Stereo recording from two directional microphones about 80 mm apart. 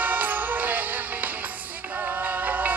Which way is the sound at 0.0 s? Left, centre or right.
Right.